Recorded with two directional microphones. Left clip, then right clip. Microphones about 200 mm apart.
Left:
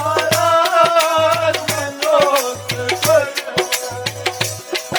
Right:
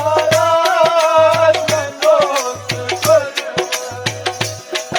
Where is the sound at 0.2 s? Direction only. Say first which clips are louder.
Even; 50° left (ahead or behind).